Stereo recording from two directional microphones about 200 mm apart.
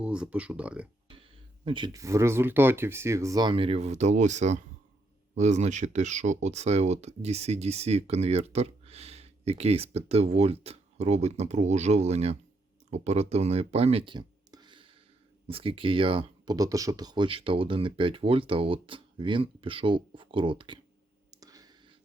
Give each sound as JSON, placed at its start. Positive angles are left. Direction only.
{"t": 0.0, "sound": "speech", "side_deg": -5}
{"t": 1.6, "sound": "speech", "side_deg": -25}
{"t": 21.2, "sound": "whispering", "side_deg": -20}